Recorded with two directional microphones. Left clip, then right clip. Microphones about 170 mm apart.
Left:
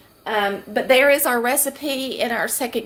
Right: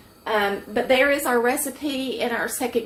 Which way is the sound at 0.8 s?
90° left.